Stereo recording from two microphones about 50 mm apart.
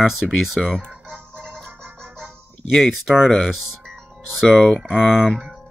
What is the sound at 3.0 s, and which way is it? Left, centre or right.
Speech, centre.